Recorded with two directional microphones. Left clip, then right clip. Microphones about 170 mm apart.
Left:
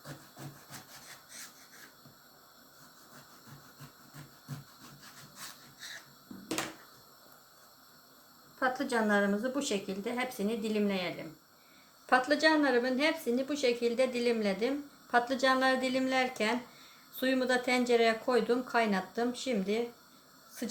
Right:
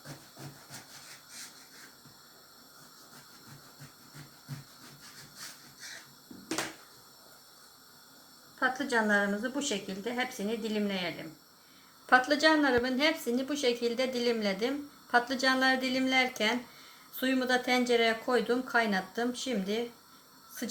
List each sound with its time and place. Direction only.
8.5 s a woman's voice: 15° left (ahead or behind)